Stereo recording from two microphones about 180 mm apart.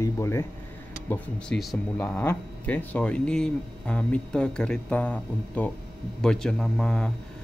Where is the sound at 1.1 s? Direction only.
Centre (ahead or behind).